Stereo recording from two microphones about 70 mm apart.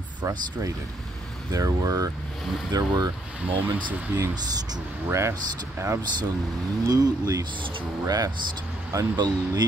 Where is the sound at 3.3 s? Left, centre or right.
Right.